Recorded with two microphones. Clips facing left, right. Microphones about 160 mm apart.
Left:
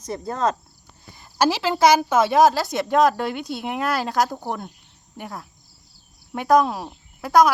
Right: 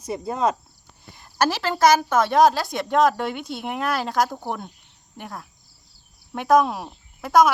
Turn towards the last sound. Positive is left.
turn(degrees=0)  # may be behind; listen again after turning